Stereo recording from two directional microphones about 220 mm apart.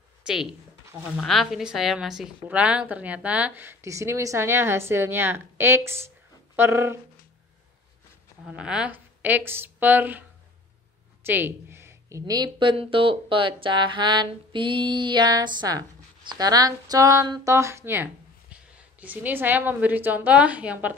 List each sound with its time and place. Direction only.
0.3 s a woman's voice: 5° right (ahead or behind)
8.5 s a woman's voice: 5° right (ahead or behind)
11.2 s a woman's voice: 10° right (ahead or behind)